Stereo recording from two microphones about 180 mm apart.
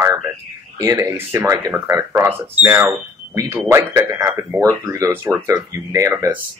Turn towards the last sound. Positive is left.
turn(degrees=-15)  # may be behind; listen again after turning